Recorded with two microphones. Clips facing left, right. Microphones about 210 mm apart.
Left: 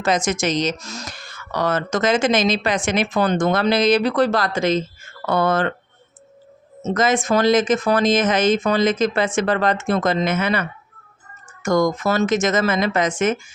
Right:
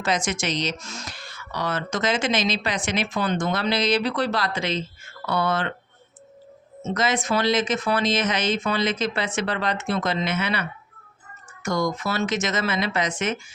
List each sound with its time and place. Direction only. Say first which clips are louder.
0.0 s speech: left 5 dB; 45° left (ahead or behind)
6.8 s speech: left 5 dB; 45° left (ahead or behind)